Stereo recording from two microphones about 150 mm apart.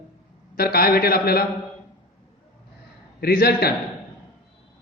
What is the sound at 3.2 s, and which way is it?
Speech, 90° left.